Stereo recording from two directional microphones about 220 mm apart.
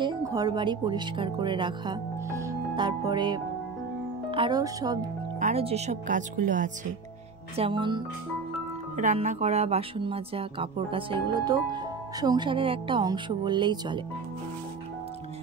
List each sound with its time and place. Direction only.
0.0 s speech: 20° right (ahead or behind)
5.4 s speech: 30° right (ahead or behind)
7.5 s speech: 25° right (ahead or behind)
8.9 s speech: 35° right (ahead or behind)